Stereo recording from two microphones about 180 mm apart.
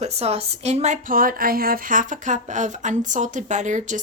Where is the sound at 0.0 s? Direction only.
35° right (ahead or behind).